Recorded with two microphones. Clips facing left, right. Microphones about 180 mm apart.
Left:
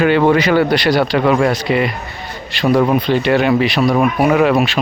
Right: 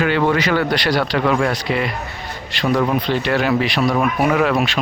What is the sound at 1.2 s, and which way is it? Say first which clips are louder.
Speech: left 4 dB; 15° left (ahead or behind).